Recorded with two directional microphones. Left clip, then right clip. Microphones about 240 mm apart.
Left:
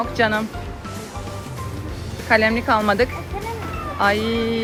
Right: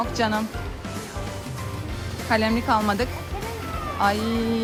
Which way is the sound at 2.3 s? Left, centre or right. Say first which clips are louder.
Left 5 dB; centre.